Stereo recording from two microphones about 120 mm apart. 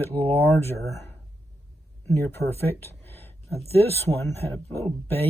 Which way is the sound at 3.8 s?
20° left (ahead or behind).